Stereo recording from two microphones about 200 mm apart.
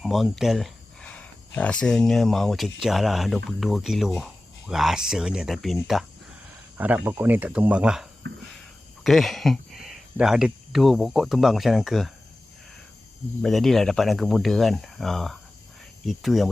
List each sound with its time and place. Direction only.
0.0 s speech: centre (ahead or behind)
8.2 s a sound: 60° right (ahead or behind)
9.0 s speech: centre (ahead or behind)
13.4 s speech: centre (ahead or behind)